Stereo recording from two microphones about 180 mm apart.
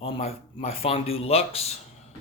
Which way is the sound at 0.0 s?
35° left (ahead or behind).